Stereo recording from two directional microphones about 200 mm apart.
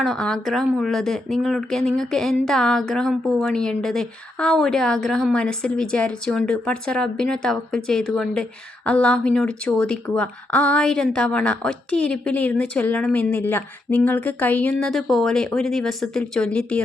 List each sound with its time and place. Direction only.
0.0 s a woman's voice: centre (ahead or behind)